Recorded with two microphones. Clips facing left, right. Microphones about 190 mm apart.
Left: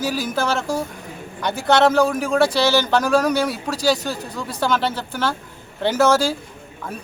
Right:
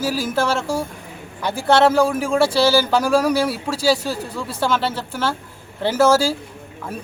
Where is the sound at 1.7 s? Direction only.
5° right (ahead or behind).